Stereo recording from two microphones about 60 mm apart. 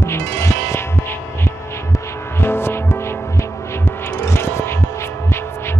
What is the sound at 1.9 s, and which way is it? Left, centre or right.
Music, left.